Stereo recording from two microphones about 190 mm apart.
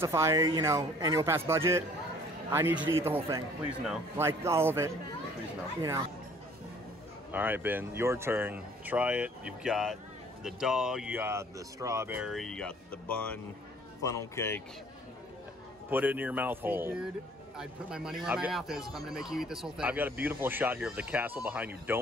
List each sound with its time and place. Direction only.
0.0 s speech: 15° right (ahead or behind)
7.2 s speech: 10° right (ahead or behind); by 14.6 s 15° left (ahead or behind)
15.9 s speech: 10° right (ahead or behind)